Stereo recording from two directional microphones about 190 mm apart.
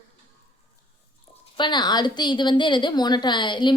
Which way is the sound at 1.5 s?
25° left (ahead or behind).